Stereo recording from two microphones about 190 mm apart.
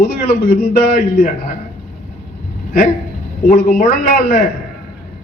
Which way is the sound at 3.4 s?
45° left (ahead or behind).